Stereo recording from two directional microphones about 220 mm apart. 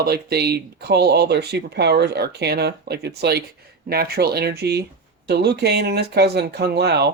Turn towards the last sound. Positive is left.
turn(degrees=-50)  # may be behind; listen again after turning